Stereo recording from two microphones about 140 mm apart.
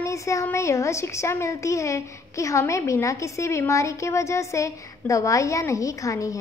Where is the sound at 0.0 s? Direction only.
20° left (ahead or behind).